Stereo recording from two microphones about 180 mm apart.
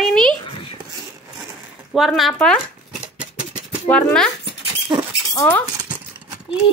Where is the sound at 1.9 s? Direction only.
Centre (ahead or behind).